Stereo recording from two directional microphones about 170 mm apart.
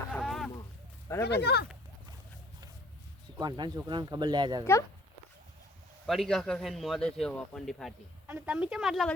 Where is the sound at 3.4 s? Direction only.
25° right (ahead or behind).